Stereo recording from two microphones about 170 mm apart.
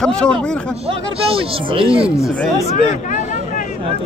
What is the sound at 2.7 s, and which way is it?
Vehicle, 40° left (ahead or behind).